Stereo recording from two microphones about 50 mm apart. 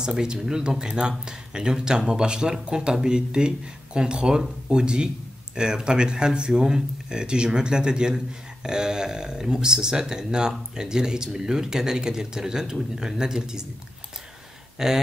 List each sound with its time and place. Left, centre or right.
0.0 s speech: centre
14.8 s speech: centre